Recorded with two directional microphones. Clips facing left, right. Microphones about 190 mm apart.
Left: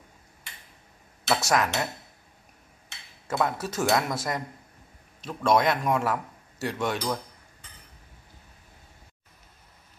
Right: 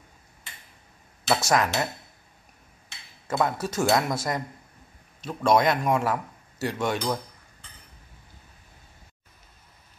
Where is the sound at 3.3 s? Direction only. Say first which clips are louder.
Right 2 dB; centre (ahead or behind).